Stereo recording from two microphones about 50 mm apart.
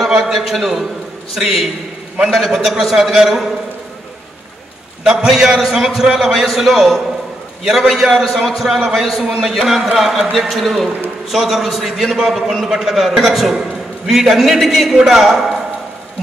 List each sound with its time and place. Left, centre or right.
0.0 s a man's voice: centre
5.1 s a man's voice: centre